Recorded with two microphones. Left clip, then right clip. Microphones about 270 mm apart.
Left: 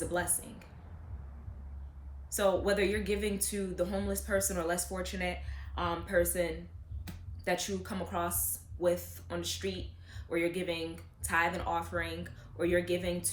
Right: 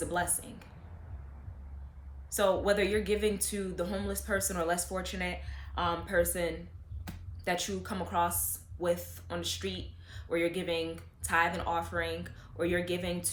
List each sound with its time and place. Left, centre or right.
0.0 s speech: centre
2.3 s speech: centre
7.1 s a sound: right
7.4 s speech: centre